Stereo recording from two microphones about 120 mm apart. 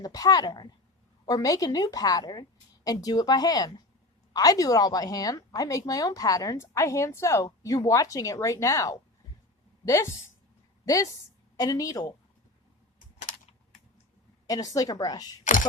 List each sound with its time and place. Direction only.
0.0 s a woman's voice: 30° left (ahead or behind)
14.4 s a woman's voice: 30° left (ahead or behind)